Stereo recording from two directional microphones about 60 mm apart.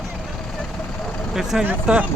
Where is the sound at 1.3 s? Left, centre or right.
Centre.